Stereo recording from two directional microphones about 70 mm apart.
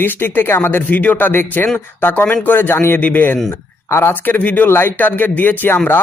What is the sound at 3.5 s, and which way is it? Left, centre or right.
Speech, left.